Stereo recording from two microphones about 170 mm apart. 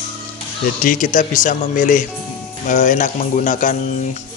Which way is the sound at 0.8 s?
55° left (ahead or behind).